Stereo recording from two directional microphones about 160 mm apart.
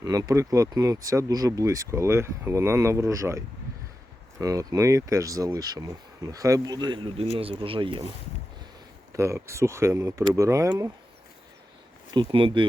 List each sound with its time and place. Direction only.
0.0 s speech: 25° right (ahead or behind)
9.1 s speech: 20° right (ahead or behind)
12.1 s speech: 30° right (ahead or behind)